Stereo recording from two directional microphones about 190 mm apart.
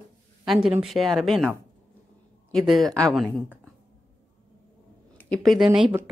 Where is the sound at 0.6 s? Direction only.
Centre (ahead or behind).